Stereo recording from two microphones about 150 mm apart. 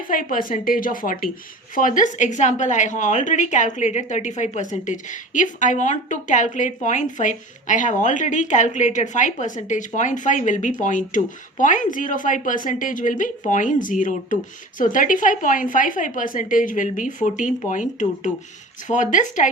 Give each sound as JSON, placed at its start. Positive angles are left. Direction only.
{"t": 0.1, "sound": "a woman's voice", "side_deg": 65}